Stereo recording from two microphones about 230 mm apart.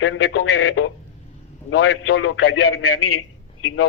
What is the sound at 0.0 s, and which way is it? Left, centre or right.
A man's voice, left.